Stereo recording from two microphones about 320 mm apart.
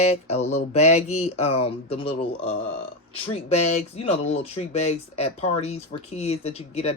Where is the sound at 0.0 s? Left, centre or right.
Centre.